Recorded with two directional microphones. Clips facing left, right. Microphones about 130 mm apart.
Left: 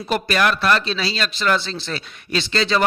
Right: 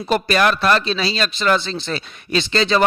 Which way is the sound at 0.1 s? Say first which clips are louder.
Right 3 dB; 30° right (ahead or behind).